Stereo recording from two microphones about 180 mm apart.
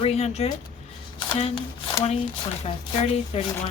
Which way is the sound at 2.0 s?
35° left (ahead or behind).